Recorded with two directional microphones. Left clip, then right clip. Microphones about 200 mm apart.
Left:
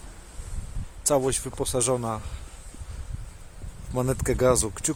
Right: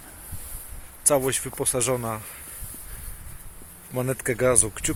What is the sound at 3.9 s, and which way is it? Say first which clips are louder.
Speech: even; 15° left (ahead or behind).